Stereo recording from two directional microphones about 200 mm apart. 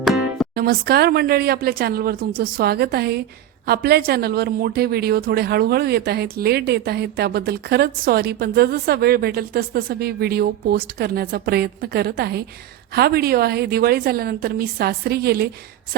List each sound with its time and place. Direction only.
0.0 s music: centre (ahead or behind)
0.5 s a woman's voice: 50° right (ahead or behind)